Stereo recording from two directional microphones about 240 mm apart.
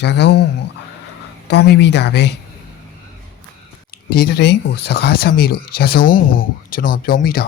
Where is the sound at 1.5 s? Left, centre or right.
Left.